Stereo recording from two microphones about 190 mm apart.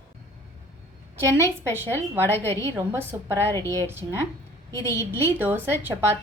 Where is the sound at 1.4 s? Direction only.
10° right (ahead or behind).